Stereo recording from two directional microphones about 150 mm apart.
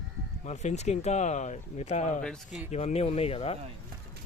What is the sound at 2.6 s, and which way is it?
Speech, 45° left (ahead or behind).